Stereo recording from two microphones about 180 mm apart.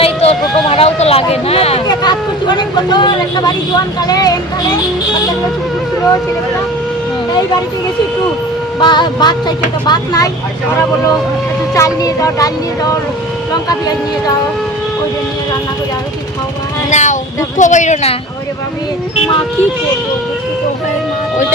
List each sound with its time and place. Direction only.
0.0 s a sound: 35° left (ahead or behind)
1.9 s speech: 25° left (ahead or behind)
8.8 s speech: 25° left (ahead or behind)
11.7 s speech: 20° left (ahead or behind)
16.9 s a sound: 40° left (ahead or behind)
17.6 s speech: 45° left (ahead or behind)